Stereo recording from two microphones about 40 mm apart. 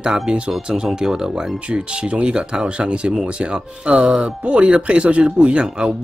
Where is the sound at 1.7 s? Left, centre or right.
Right.